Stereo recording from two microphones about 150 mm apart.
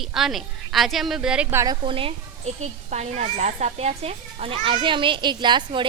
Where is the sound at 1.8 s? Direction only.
35° right (ahead or behind).